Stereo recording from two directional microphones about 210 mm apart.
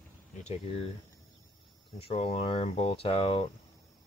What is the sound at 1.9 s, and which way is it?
Speech, 30° left (ahead or behind).